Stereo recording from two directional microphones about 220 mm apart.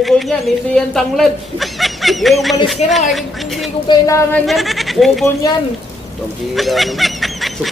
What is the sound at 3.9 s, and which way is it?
Speech, 15° left (ahead or behind).